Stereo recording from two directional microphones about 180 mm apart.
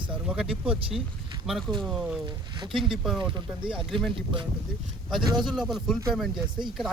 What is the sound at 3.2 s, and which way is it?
Speech, 25° right (ahead or behind).